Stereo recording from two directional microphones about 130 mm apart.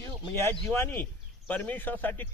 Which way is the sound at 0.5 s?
15° left (ahead or behind).